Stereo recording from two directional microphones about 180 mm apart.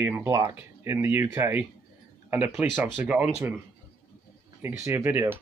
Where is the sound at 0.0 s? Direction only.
10° right (ahead or behind).